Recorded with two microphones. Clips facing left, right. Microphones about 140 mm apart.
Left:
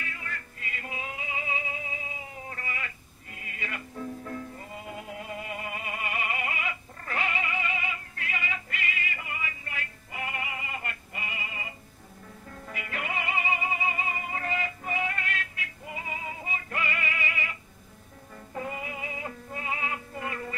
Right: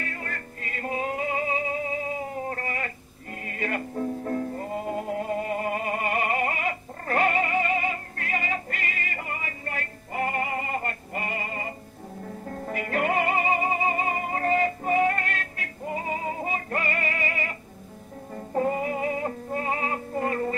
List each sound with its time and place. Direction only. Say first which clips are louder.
0.0 s music: right 5 dB; 45° right (ahead or behind)